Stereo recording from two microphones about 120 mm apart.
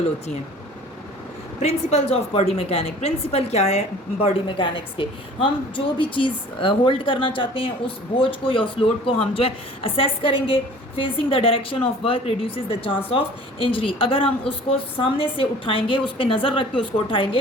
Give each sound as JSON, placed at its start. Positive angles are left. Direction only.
{"t": 1.6, "sound": "a woman's voice", "side_deg": 60}